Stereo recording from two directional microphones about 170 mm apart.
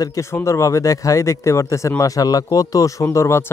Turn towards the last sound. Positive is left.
turn(degrees=15)  # may be behind; listen again after turning